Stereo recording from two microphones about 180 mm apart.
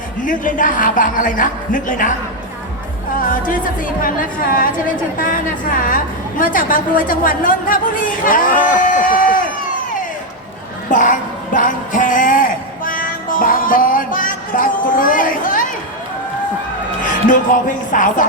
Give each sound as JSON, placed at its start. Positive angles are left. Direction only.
{"t": 0.2, "sound": "a man's voice", "side_deg": 50}
{"t": 3.2, "sound": "a man's voice", "side_deg": 50}
{"t": 10.9, "sound": "a sound", "side_deg": 45}
{"t": 17.9, "sound": "a man's voice", "side_deg": 50}